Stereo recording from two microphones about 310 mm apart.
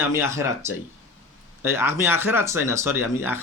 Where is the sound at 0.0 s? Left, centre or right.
Centre.